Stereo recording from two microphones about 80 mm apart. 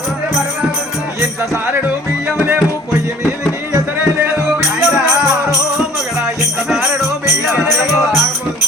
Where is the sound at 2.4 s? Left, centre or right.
Right.